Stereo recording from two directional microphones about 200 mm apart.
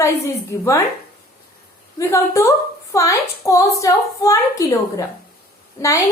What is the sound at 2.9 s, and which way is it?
A woman's voice, 15° left (ahead or behind).